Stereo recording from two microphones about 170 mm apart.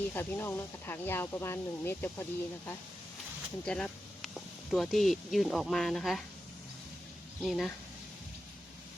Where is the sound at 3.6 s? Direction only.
5° left (ahead or behind).